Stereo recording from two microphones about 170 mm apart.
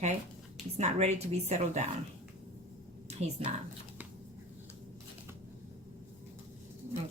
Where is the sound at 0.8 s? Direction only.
40° right (ahead or behind).